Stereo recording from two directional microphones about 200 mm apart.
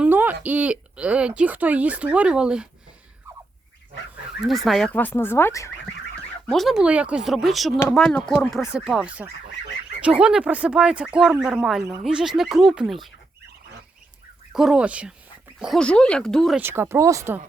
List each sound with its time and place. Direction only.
0.0 s speech: 10° right (ahead or behind)
3.3 s a sound: 15° right (ahead or behind)
4.4 s speech: centre (ahead or behind)
6.5 s speech: centre (ahead or behind)
14.5 s speech: centre (ahead or behind)
16.6 s speech: 10° right (ahead or behind)